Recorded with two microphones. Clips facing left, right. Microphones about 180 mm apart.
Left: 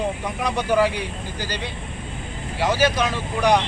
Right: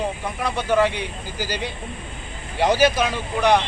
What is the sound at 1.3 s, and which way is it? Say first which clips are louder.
Speech: right 4 dB; 10° right (ahead or behind).